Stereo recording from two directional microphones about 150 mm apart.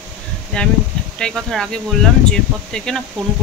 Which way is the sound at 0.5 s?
5° left (ahead or behind).